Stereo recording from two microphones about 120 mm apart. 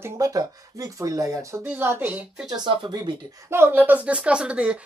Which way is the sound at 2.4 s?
40° right (ahead or behind).